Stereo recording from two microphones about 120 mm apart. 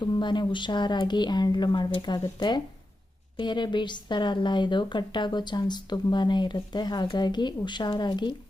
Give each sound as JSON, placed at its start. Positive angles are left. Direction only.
{"t": 0.0, "sound": "speech", "side_deg": 40}